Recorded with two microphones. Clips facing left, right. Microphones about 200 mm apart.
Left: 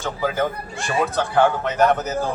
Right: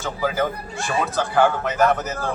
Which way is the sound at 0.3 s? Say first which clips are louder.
Even; centre (ahead or behind).